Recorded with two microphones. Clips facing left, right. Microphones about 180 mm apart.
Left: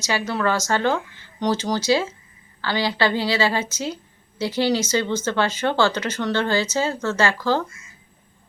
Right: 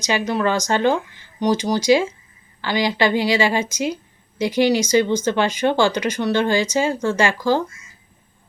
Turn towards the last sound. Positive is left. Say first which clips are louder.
# right 2 dB
turn(degrees=-15)  # may be behind; listen again after turning